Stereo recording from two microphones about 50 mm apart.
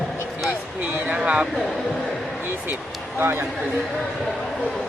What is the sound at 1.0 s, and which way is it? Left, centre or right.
Speech, right.